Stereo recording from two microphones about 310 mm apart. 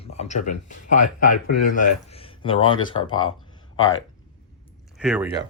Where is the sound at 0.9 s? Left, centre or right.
Left.